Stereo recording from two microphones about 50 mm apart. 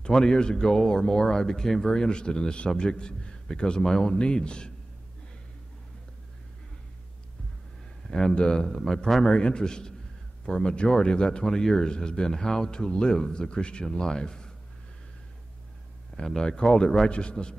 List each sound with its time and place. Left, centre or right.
0.0 s speech: centre
8.1 s speech: centre
16.2 s speech: centre